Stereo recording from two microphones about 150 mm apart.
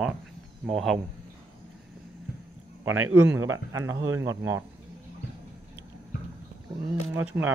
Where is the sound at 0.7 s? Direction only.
Centre (ahead or behind).